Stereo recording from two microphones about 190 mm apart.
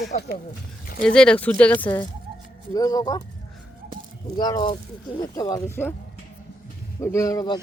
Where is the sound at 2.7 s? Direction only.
20° left (ahead or behind).